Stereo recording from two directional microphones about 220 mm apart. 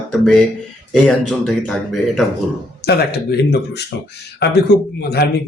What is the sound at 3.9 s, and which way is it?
A man's voice, 50° left (ahead or behind).